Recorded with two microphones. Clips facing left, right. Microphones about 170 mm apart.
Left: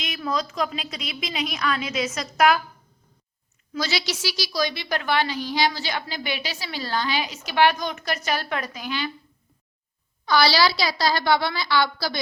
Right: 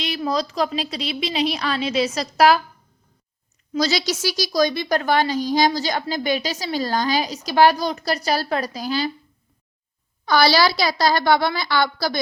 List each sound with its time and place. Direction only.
0.0 s a woman's voice: 35° right (ahead or behind)
3.8 s a woman's voice: 40° right (ahead or behind)
10.2 s a woman's voice: 45° right (ahead or behind)